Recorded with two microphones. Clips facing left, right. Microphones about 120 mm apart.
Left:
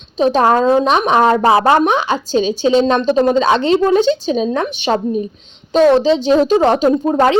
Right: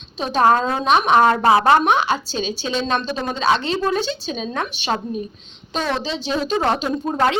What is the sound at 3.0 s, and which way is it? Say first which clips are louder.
Speech: left 12 dB; 45° left (ahead or behind).